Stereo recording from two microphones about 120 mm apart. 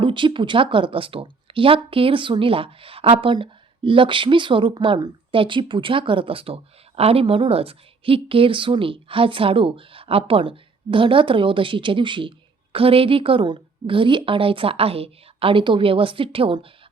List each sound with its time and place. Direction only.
0.0 s speech: 45° right (ahead or behind)